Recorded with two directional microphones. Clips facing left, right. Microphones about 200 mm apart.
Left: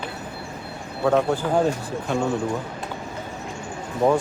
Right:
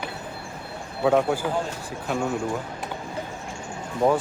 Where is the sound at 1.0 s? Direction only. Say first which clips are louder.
Left 1 dB; 5° right (ahead or behind).